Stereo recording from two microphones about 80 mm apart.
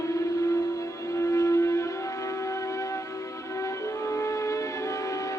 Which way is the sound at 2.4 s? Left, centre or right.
Left.